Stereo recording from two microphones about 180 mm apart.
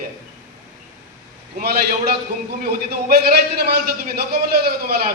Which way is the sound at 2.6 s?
60° right (ahead or behind).